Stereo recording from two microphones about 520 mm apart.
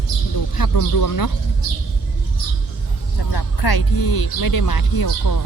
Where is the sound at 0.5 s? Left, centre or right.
Left.